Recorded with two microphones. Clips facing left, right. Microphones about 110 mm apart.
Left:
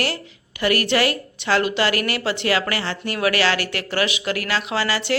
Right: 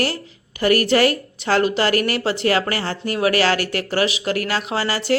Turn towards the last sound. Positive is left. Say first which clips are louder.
# even
turn(degrees=-40)  # may be behind; listen again after turning